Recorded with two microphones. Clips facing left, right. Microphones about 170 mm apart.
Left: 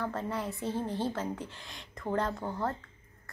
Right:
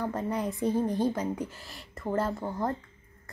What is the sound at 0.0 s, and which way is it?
A woman's voice, 15° right (ahead or behind).